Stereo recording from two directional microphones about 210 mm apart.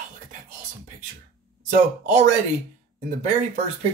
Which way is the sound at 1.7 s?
35° right (ahead or behind).